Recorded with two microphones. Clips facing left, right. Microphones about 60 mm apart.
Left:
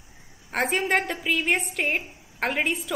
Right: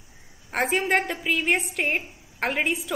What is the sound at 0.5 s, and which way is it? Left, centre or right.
A woman's voice, centre.